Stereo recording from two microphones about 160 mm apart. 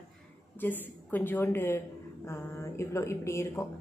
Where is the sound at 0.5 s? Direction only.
10° left (ahead or behind).